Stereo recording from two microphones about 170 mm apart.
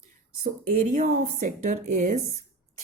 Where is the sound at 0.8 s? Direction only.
50° right (ahead or behind).